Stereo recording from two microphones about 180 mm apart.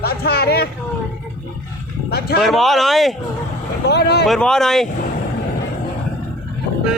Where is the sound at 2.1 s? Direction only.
60° left (ahead or behind).